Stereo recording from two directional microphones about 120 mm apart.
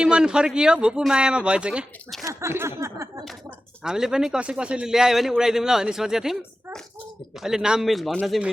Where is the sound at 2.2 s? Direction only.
25° right (ahead or behind).